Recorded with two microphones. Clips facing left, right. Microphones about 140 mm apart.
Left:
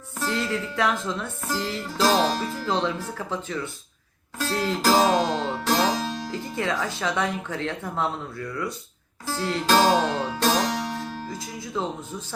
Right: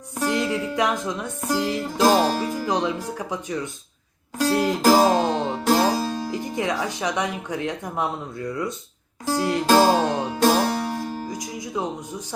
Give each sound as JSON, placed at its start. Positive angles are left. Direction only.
{"t": 0.2, "sound": "music", "side_deg": -15}